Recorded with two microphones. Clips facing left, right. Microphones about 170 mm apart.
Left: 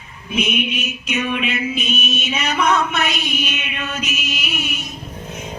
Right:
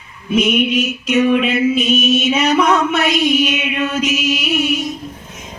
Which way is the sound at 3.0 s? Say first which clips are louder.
Right 10 dB; 90° right.